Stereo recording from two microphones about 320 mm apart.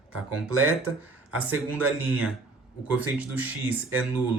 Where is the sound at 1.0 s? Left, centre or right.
Centre.